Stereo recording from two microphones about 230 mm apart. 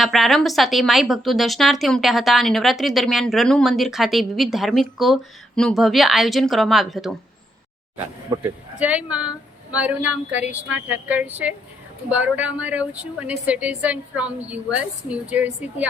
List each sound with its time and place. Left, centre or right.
0.0 s speech: centre
8.3 s a woman's voice: centre
8.8 s a woman's voice: centre